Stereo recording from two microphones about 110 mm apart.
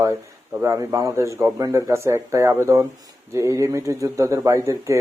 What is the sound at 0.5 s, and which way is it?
Speech, 25° right (ahead or behind).